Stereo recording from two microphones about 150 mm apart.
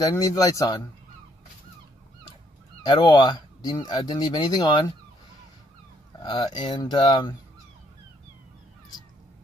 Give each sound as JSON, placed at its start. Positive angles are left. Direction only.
{"t": 0.2, "sound": "speech", "side_deg": 25}
{"t": 2.8, "sound": "speech", "side_deg": 30}
{"t": 6.1, "sound": "speech", "side_deg": 30}